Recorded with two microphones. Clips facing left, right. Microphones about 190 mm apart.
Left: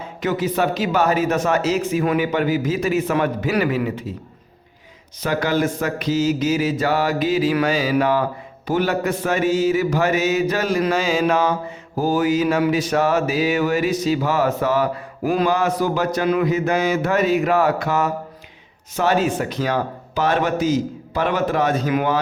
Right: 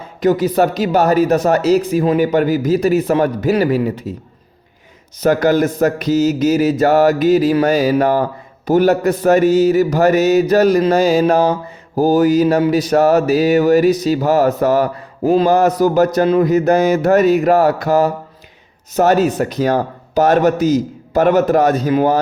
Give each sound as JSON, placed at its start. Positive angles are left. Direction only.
{"t": 0.2, "sound": "speech", "side_deg": -40}
{"t": 5.2, "sound": "speech", "side_deg": -45}
{"t": 7.6, "sound": "mantra", "side_deg": -45}
{"t": 8.6, "sound": "speech", "side_deg": -40}
{"t": 15.2, "sound": "mantra", "side_deg": -25}
{"t": 15.4, "sound": "speech", "side_deg": -40}